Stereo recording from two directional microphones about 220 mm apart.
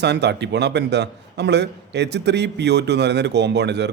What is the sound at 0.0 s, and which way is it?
A man's voice, 50° right (ahead or behind).